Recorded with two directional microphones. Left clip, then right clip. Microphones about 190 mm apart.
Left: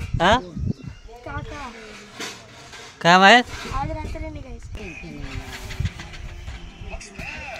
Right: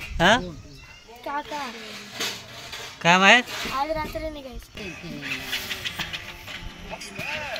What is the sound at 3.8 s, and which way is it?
Speech, 5° left (ahead or behind).